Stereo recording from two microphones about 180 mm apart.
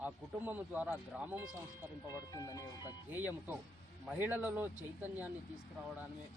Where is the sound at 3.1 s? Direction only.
10° right (ahead or behind).